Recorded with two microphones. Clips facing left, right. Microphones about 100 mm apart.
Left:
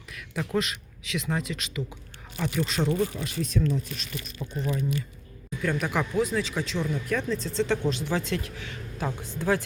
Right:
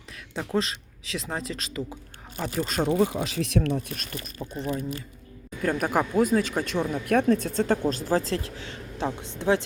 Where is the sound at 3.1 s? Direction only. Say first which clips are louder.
Right 4 dB; 90° right; by 3.8 s 70° right (ahead or behind).